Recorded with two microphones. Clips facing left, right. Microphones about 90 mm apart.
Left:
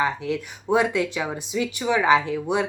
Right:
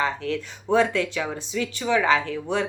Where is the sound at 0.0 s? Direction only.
15° left (ahead or behind).